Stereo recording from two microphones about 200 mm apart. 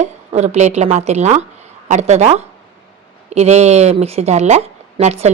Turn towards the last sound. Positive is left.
turn(degrees=-30)  # may be behind; listen again after turning